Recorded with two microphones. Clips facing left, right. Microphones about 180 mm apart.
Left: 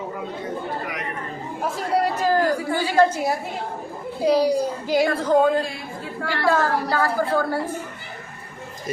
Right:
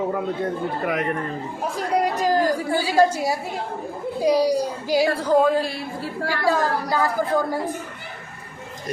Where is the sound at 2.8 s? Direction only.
10° right (ahead or behind).